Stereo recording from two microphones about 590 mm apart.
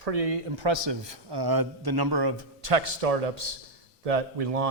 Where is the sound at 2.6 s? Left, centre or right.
Right.